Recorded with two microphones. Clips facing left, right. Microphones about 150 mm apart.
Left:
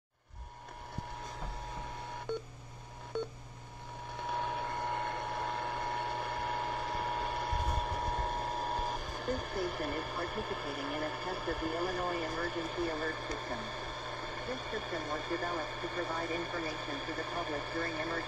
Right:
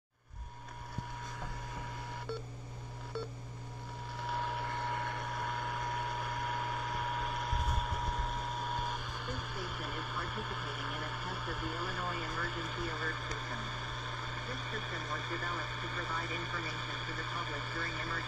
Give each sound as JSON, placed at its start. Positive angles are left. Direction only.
{"t": 2.3, "sound": "telephone dialing", "side_deg": 15}
{"t": 4.2, "sound": "vehicle", "side_deg": 20}
{"t": 14.1, "sound": "speech", "side_deg": 35}